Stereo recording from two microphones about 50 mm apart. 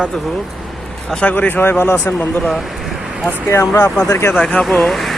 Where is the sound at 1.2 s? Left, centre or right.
Left.